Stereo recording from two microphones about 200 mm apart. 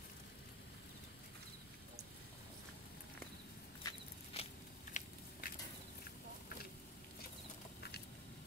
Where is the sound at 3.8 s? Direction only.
30° left (ahead or behind).